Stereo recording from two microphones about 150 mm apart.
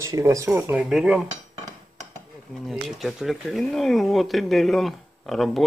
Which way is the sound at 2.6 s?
Centre (ahead or behind).